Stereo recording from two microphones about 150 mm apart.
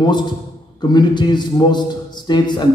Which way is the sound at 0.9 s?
30° left (ahead or behind).